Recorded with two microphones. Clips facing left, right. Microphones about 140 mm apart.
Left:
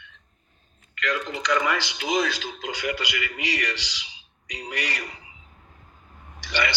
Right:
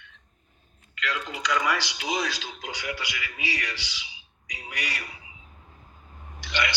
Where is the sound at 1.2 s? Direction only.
10° right (ahead or behind).